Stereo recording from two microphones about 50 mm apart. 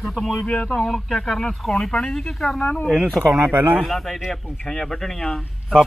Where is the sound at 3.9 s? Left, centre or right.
Centre.